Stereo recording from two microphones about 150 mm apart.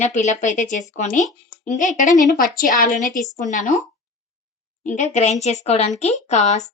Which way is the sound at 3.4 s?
55° left (ahead or behind).